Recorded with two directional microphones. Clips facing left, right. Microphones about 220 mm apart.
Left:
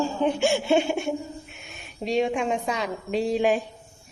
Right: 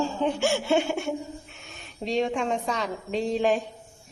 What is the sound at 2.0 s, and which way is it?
A woman's voice, 10° left (ahead or behind).